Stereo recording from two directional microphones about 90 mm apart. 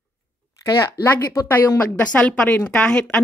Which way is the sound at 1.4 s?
30° left (ahead or behind).